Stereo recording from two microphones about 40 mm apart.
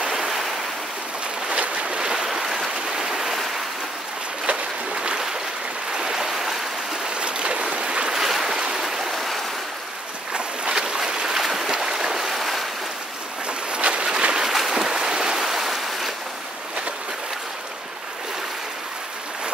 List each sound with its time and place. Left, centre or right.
0.0 s waves: centre
1.5 s boat: right
2.3 s stream: centre
4.5 s boat: right
5.9 s a sound: centre
7.2 s stream: right; by 9.4 s centre
10.3 s boat: right
11.3 s boat: centre
12.4 s waves: centre
13.5 s vehicle: right
14.7 s waves: centre